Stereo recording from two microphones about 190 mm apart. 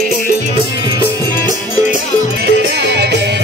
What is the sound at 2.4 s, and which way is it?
Music, 60° right (ahead or behind).